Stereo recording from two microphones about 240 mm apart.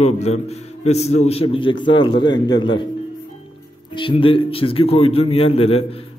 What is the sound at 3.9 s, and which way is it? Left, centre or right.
A man's voice, left.